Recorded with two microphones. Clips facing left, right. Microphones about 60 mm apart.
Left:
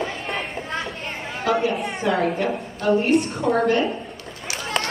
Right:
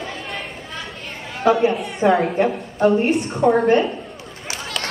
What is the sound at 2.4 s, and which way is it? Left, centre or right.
Speech, centre.